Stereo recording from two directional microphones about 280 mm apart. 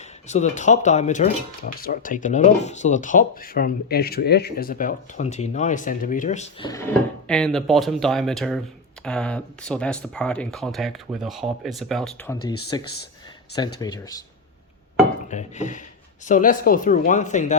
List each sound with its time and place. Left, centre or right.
0.0 s speech: left
7.3 s speech: centre
15.3 s speech: left